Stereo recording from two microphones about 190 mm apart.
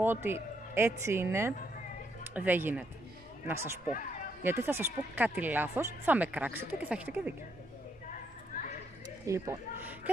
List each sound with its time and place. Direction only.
0.0 s speech: 10° right (ahead or behind)
8.1 s a sound: 40° left (ahead or behind)
9.2 s speech: 15° right (ahead or behind)